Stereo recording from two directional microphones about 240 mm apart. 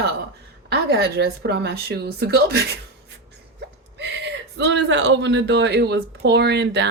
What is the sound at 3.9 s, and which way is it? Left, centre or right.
Speech, right.